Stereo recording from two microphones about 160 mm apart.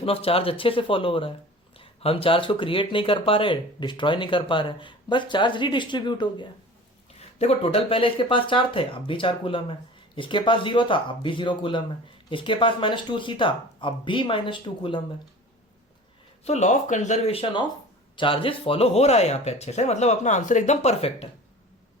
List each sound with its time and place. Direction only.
0.0 s speech: 35° left (ahead or behind)
7.2 s speech: 40° left (ahead or behind)
16.4 s speech: 45° left (ahead or behind)